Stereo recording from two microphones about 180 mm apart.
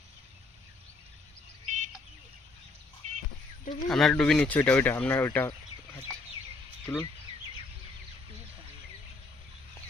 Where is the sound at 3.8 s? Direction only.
5° left (ahead or behind).